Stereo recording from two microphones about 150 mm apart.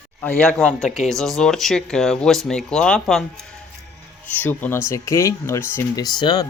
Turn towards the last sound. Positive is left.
turn(degrees=30)  # may be behind; listen again after turning